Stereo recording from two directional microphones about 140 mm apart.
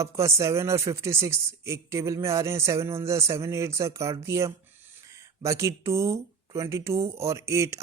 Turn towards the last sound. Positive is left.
turn(degrees=-20)  # may be behind; listen again after turning